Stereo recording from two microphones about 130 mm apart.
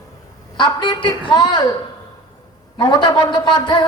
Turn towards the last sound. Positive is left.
turn(degrees=35)  # may be behind; listen again after turning